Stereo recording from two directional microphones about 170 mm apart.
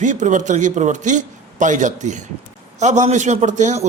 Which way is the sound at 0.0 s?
45° right (ahead or behind).